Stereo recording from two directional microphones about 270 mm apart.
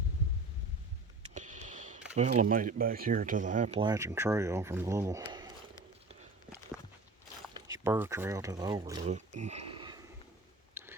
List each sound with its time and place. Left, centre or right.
1.3 s a sound: right
2.1 s speech: right
7.5 s speech: centre